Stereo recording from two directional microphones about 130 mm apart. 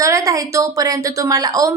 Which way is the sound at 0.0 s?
25° right (ahead or behind).